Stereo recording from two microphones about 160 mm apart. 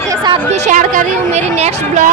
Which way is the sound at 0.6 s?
50° right (ahead or behind).